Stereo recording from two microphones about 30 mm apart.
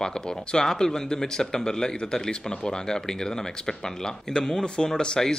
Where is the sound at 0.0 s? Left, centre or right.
Left.